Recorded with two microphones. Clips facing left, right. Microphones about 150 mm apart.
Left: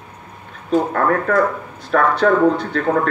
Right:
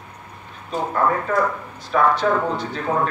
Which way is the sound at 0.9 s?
60° left (ahead or behind).